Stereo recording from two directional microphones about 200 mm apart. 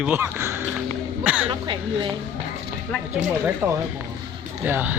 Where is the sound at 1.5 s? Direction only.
25° right (ahead or behind).